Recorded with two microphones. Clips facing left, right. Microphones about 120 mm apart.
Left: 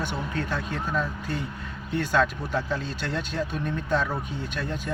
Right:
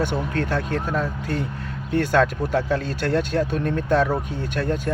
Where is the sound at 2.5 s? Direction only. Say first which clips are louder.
Right 6 dB; 65° right (ahead or behind).